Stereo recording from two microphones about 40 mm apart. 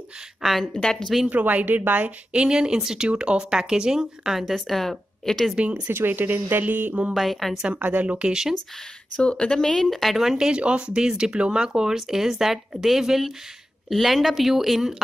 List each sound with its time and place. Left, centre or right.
0.4 s a woman's voice: centre
0.7 s speech: centre
1.3 s speech: right
2.3 s speech: right
4.3 s a woman's voice: centre
5.9 s speech: right
7.2 s a woman's voice: centre
7.8 s speech: right
8.3 s speech: centre
9.2 s speech: left; by 10.3 s centre
10.3 s a woman's voice: centre